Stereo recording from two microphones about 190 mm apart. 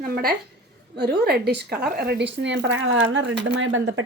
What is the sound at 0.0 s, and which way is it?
A woman's voice, 50° right (ahead or behind).